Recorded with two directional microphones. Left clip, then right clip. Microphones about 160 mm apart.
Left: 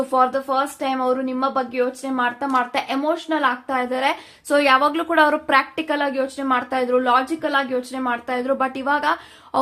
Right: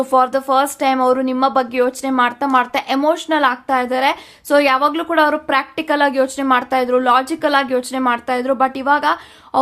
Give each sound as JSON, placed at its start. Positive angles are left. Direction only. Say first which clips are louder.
{"t": 0.1, "sound": "speech", "louder": "right 5 dB", "side_deg": -30}
{"t": 5.9, "sound": "speech", "louder": "right 9 dB", "side_deg": -25}